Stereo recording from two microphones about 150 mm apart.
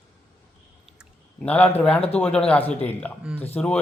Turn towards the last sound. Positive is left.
turn(degrees=10)  # may be behind; listen again after turning